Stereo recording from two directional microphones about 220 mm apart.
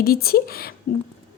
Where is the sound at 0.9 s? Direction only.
40° left (ahead or behind).